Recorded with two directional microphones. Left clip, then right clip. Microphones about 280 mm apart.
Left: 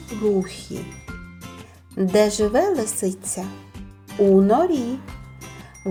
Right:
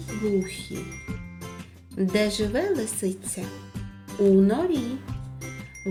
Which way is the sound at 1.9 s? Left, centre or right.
Centre.